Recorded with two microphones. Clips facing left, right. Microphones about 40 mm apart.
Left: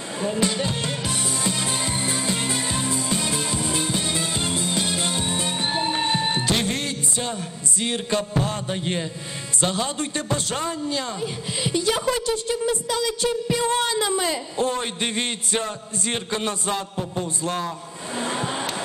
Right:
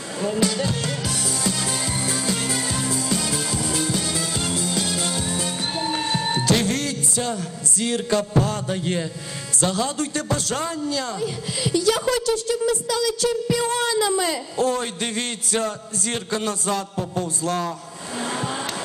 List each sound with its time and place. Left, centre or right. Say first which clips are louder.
0.2 s music: right 1 dB; left
8.4 s a man's voice: right 3 dB; left
18.1 s a sound: even; left